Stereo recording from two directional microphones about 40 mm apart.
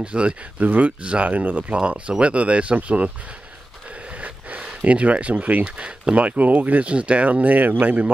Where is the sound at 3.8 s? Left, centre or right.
Right.